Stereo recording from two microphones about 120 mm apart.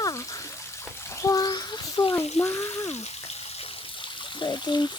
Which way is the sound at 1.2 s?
30° left (ahead or behind).